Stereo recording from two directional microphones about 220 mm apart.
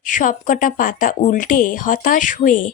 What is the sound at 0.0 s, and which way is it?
Speech, 35° left (ahead or behind).